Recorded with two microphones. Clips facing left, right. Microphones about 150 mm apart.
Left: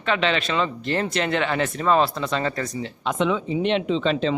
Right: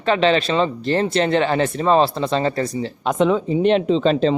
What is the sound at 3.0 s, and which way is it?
Speech, 45° right (ahead or behind).